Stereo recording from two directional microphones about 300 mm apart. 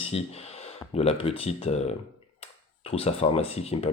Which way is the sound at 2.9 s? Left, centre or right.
Centre.